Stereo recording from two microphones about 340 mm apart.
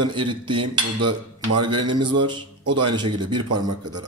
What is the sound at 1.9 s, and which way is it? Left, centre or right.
Speech, centre.